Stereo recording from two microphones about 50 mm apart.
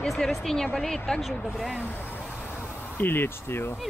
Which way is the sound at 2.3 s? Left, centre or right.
Left.